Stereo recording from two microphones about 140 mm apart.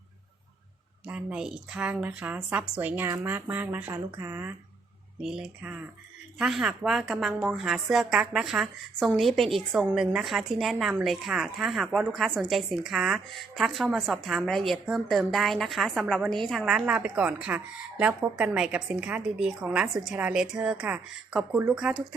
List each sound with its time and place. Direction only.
1.0 s a woman's voice: 5° right (ahead or behind)
5.2 s speech: 5° right (ahead or behind)